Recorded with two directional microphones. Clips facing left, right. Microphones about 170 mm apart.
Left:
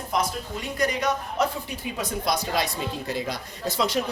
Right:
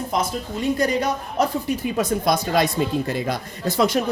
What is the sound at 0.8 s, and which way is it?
Speech, 30° right (ahead or behind).